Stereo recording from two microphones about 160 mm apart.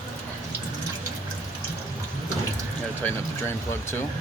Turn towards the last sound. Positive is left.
turn(degrees=15)  # may be behind; listen again after turning